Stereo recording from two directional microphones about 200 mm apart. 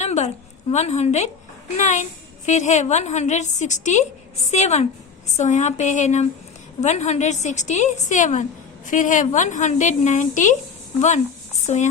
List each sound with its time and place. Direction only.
0.0 s a sound: 35° left (ahead or behind)
0.7 s a woman's voice: 35° left (ahead or behind)
11.6 s speech: 35° left (ahead or behind)